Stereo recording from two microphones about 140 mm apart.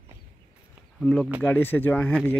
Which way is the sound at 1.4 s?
15° left (ahead or behind).